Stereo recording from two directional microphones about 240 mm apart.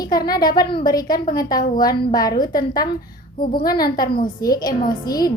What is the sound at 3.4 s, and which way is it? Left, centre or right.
Speech, left.